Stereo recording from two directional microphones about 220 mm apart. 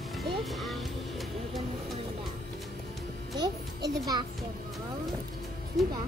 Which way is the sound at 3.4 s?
20° right (ahead or behind).